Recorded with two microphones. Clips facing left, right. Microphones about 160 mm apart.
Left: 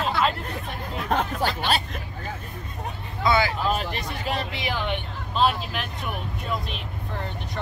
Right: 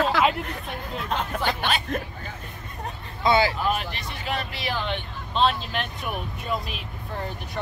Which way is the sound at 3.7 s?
40° left (ahead or behind).